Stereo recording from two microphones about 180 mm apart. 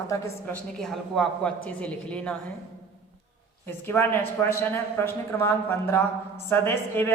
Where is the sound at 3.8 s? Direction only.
10° left (ahead or behind).